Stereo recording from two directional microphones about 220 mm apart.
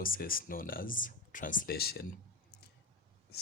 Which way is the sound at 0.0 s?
40° left (ahead or behind).